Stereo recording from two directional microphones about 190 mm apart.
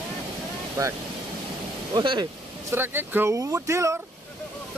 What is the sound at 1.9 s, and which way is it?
Speech, 25° right (ahead or behind).